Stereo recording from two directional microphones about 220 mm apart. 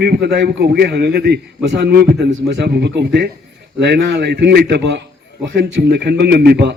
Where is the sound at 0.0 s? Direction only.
50° right (ahead or behind).